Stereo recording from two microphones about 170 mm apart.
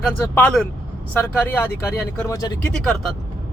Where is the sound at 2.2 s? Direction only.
20° left (ahead or behind).